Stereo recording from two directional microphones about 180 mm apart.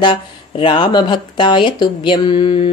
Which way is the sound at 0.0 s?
25° left (ahead or behind).